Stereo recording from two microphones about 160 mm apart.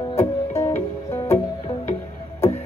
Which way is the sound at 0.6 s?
15° left (ahead or behind).